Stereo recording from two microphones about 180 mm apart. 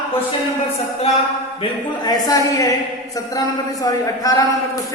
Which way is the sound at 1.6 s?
20° left (ahead or behind).